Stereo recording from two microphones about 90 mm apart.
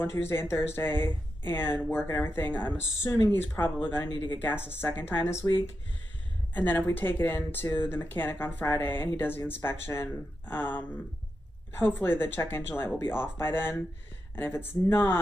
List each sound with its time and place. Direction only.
0.0 s speech: 30° left (ahead or behind)
3.0 s speech: 30° left (ahead or behind)
6.5 s speech: 20° left (ahead or behind)